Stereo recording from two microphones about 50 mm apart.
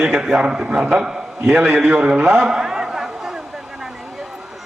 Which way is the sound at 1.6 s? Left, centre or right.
Right.